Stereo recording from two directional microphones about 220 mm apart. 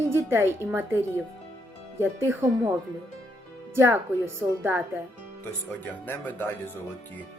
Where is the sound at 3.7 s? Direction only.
10° right (ahead or behind).